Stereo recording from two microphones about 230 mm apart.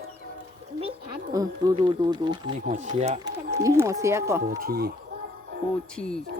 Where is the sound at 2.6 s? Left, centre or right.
Right.